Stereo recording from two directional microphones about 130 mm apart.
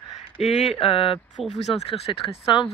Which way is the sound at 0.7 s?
45° left (ahead or behind).